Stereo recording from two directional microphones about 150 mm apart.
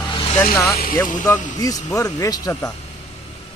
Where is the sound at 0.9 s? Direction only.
15° left (ahead or behind).